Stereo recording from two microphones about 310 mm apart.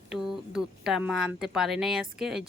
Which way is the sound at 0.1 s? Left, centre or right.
Centre.